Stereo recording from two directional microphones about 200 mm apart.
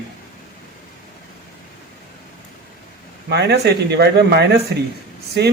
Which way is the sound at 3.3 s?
55° right (ahead or behind).